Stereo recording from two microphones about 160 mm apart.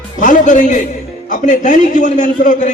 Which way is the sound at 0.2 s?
55° left (ahead or behind).